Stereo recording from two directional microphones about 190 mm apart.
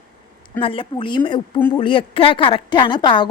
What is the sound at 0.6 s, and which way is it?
Speech, 30° left (ahead or behind).